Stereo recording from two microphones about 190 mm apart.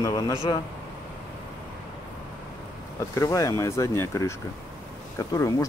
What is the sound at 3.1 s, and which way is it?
Speech, 15° left (ahead or behind).